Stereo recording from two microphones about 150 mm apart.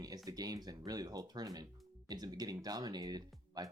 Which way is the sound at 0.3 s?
25° right (ahead or behind).